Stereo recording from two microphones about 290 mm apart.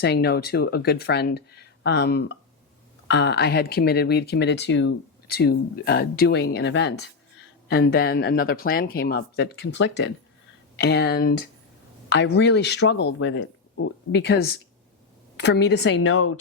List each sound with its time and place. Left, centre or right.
0.0 s speech: left
15.6 s speech: left